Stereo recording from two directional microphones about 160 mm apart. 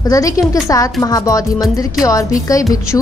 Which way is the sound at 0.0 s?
20° left (ahead or behind).